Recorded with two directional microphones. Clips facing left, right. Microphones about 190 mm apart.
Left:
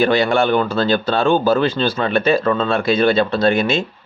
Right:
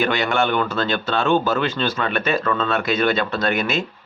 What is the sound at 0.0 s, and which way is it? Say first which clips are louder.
Speech: left 5 dB; 35° left (ahead or behind).